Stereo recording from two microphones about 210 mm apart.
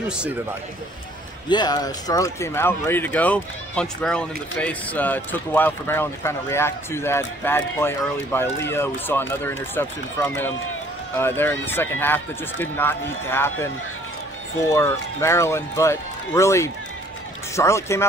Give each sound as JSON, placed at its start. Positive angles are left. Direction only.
{"t": 1.5, "sound": "speech", "side_deg": 20}
{"t": 14.7, "sound": "speech", "side_deg": 15}